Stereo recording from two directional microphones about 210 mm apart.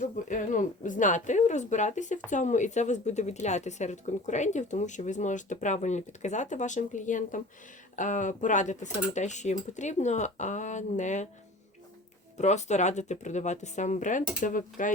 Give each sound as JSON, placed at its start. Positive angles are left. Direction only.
{"t": 0.0, "sound": "speech", "side_deg": 35}
{"t": 12.4, "sound": "speech", "side_deg": 35}